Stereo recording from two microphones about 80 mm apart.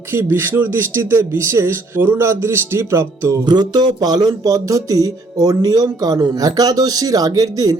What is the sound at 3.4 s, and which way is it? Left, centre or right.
Speech, right.